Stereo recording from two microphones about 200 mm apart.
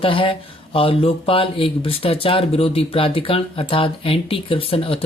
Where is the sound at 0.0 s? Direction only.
25° left (ahead or behind).